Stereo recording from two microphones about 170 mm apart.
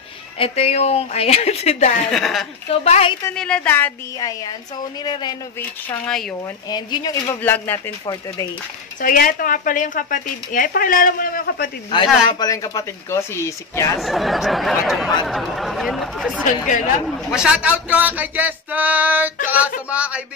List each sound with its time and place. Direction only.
0.4 s a woman's voice: 40° left (ahead or behind)
2.0 s speech: centre (ahead or behind)
2.8 s a woman's voice: 40° left (ahead or behind)
3.3 s speech: 5° left (ahead or behind)
4.2 s a woman's voice: 20° left (ahead or behind)
5.9 s speech: 5° left (ahead or behind)
6.7 s a woman's voice: 25° left (ahead or behind)
7.2 s speech: 10° left (ahead or behind)
9.0 s speech: 55° left (ahead or behind)
11.9 s a woman's voice: 25° left (ahead or behind)
13.9 s speech: centre (ahead or behind)